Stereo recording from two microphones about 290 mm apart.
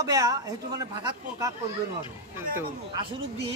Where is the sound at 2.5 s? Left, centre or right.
Centre.